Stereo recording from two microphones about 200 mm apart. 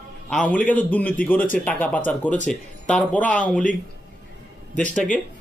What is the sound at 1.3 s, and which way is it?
Speech, 45° left (ahead or behind).